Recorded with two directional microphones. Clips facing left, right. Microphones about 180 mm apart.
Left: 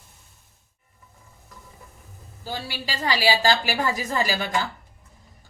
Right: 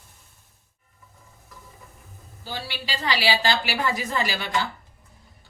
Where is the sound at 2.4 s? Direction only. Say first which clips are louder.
Left 2 dB; 45° left (ahead or behind).